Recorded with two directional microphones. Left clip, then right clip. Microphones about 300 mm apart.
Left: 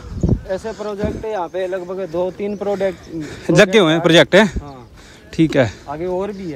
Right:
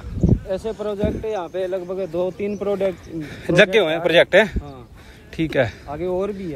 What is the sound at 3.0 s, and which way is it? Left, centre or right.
Speech, centre.